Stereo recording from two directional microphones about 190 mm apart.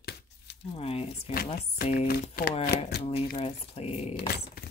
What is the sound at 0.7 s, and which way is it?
Speech, 30° left (ahead or behind).